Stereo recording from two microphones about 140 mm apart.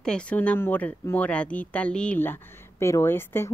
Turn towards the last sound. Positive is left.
turn(degrees=15)  # may be behind; listen again after turning